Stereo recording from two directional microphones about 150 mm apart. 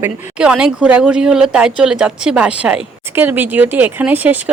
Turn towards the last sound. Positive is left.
turn(degrees=-10)  # may be behind; listen again after turning